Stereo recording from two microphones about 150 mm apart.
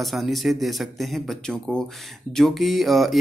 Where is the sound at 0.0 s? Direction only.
Centre (ahead or behind).